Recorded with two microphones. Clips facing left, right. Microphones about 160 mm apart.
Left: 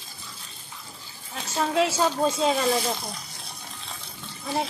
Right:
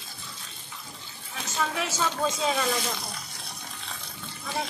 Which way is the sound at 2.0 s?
35° left (ahead or behind).